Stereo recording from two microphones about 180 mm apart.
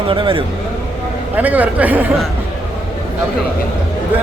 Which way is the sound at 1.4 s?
10° right (ahead or behind).